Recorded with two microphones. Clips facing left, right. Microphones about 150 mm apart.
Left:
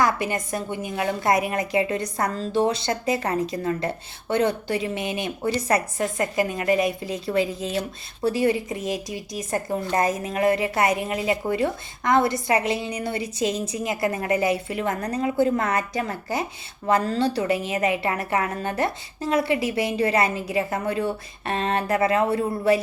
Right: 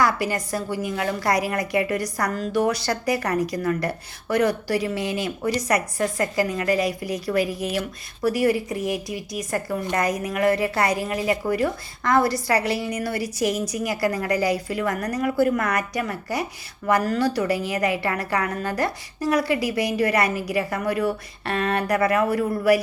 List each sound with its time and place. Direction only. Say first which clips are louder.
0.0 s a woman's voice: right 1 dB; 20° left (ahead or behind)